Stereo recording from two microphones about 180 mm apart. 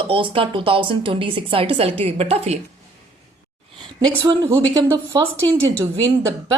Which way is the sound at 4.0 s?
25° right (ahead or behind).